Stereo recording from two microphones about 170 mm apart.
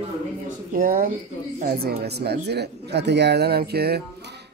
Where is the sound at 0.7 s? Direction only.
55° right (ahead or behind).